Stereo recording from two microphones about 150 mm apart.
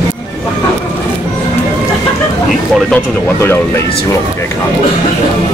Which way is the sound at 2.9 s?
15° left (ahead or behind).